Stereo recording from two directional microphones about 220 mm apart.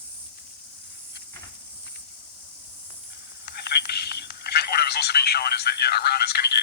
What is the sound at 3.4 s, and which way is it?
Telephone, 45° left (ahead or behind).